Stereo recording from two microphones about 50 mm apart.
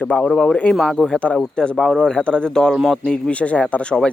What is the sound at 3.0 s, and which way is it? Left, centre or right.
Speech, left.